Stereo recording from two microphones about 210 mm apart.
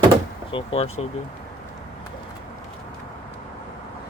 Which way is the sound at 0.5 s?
25° left (ahead or behind).